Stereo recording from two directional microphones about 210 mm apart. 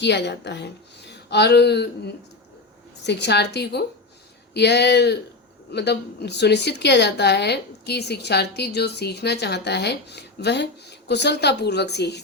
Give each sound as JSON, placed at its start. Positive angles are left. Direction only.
{"t": 0.0, "sound": "a woman's voice", "side_deg": 55}